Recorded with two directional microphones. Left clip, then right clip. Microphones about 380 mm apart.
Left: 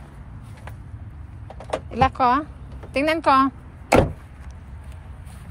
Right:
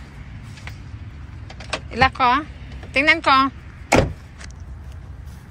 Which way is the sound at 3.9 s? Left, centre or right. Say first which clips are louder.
Even; left.